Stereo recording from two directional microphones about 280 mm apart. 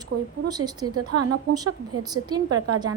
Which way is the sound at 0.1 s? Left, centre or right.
Right.